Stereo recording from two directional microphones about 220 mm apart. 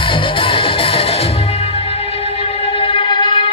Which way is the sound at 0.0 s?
25° left (ahead or behind).